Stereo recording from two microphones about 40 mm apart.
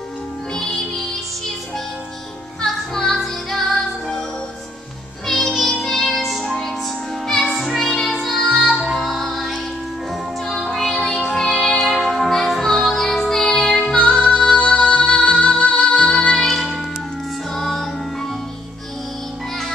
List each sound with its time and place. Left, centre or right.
2.6 s music: centre
5.5 s music: centre
8.4 s music: left
8.8 s music: centre
11.8 s music: centre
13.9 s music: left
16.3 s music: centre